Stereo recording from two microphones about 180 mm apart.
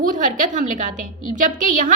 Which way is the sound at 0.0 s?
45° right (ahead or behind).